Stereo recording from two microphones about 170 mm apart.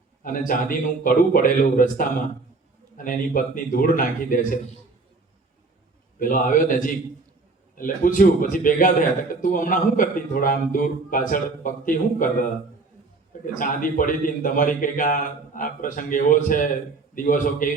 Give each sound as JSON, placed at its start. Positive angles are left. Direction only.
{"t": 0.2, "sound": "a man's voice", "side_deg": 55}
{"t": 6.1, "sound": "a man's voice", "side_deg": 55}